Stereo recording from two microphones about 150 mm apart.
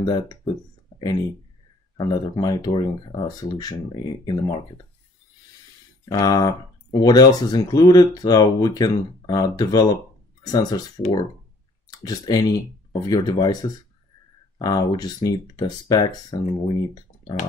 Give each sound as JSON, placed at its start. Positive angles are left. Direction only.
{"t": 0.0, "sound": "speech", "side_deg": 30}
{"t": 2.0, "sound": "speech", "side_deg": 25}
{"t": 6.0, "sound": "speech", "side_deg": 25}
{"t": 11.9, "sound": "speech", "side_deg": 25}